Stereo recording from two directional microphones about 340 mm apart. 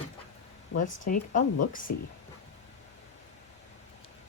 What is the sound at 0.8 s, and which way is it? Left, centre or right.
Speech, left.